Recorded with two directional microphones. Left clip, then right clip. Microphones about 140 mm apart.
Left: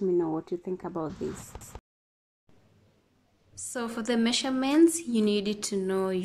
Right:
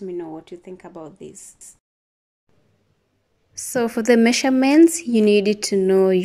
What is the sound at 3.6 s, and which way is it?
A woman's voice, 45° right (ahead or behind).